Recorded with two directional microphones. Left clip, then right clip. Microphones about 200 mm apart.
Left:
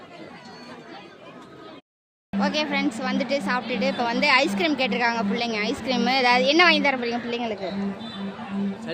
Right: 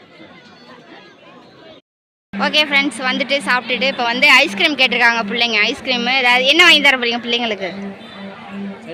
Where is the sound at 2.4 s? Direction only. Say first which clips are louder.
Right 10 dB; 5° right (ahead or behind).